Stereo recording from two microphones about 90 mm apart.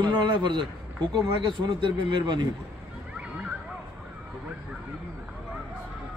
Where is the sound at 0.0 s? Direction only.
60° right (ahead or behind).